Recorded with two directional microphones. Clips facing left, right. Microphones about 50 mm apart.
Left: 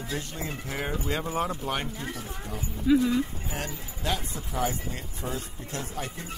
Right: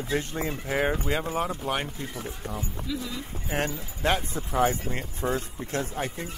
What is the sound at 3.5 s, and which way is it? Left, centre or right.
Speech, right.